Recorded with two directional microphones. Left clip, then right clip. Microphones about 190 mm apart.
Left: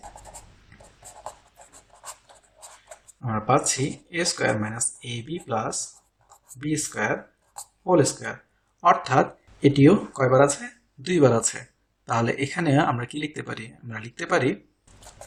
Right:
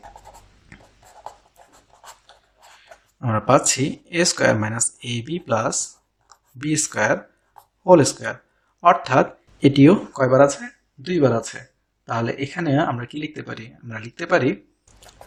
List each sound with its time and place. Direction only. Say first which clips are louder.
3.2 s speech: right 5 dB; 45° right (ahead or behind)
8.8 s speech: right 3 dB; 25° right (ahead or behind)
11.0 s speech: even; 5° right (ahead or behind)